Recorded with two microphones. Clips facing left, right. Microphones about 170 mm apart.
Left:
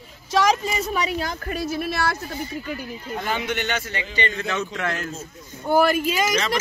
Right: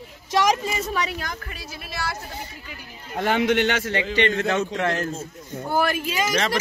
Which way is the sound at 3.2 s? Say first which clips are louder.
Right 8 dB; 75° right (ahead or behind).